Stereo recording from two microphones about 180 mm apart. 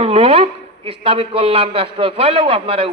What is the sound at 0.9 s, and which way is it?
A man's voice, 30° right (ahead or behind).